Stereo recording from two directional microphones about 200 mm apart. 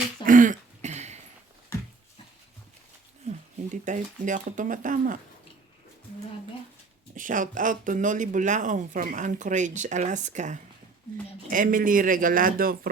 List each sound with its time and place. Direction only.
0.3 s throat clearing: 40° right (ahead or behind)
3.2 s speech: 35° right (ahead or behind)
7.2 s a man's voice: 40° right (ahead or behind)